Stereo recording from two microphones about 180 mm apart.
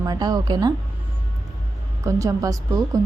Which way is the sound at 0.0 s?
20° right (ahead or behind).